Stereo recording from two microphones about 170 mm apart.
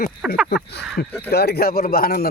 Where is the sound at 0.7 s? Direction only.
75° left (ahead or behind).